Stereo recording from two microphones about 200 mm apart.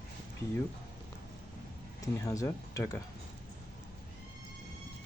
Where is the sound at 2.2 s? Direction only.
15° left (ahead or behind).